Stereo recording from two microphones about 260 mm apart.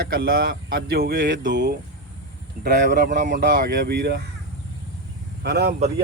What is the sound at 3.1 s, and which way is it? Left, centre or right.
Speech, right.